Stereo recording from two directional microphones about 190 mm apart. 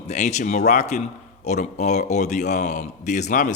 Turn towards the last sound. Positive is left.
turn(degrees=40)  # may be behind; listen again after turning